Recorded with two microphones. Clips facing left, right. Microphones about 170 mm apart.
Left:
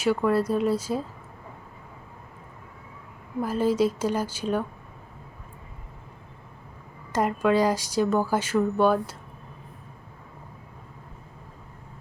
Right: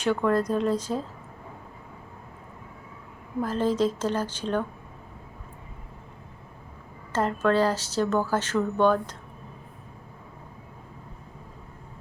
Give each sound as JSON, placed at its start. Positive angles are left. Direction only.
{"t": 0.0, "sound": "a woman's voice", "side_deg": 5}
{"t": 3.4, "sound": "a woman's voice", "side_deg": 10}
{"t": 7.1, "sound": "a woman's voice", "side_deg": 10}